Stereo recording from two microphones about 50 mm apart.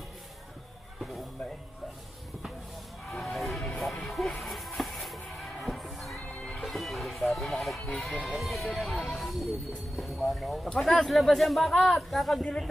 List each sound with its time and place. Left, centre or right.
0.9 s a sound: centre
3.3 s music: centre
6.3 s music: left
6.6 s music: centre
9.9 s speech: centre